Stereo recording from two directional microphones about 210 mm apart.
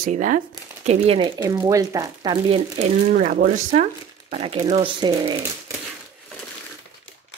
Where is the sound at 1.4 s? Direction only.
15° right (ahead or behind).